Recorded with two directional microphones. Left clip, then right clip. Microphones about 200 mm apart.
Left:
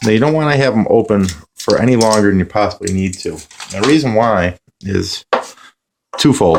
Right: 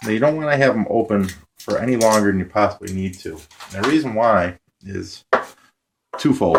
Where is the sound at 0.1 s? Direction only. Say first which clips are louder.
Left 4 dB; 40° left (ahead or behind).